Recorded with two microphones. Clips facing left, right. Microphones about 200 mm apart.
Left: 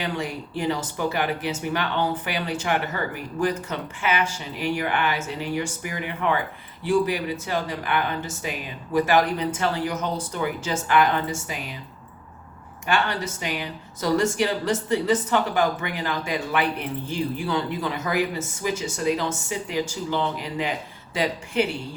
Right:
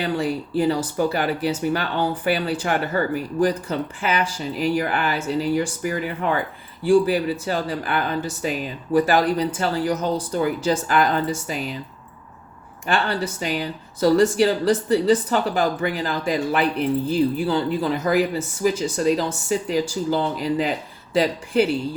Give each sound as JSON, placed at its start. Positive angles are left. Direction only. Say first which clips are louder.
{"t": 0.0, "sound": "speech", "louder": "right 6 dB", "side_deg": -35}
{"t": 12.9, "sound": "speech", "louder": "right 2 dB", "side_deg": -35}